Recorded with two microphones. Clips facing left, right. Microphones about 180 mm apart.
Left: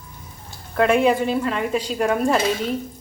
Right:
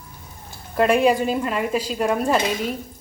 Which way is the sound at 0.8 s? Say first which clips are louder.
Even; 10° right (ahead or behind).